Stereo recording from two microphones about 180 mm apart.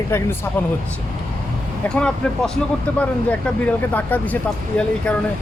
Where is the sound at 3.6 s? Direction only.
10° left (ahead or behind).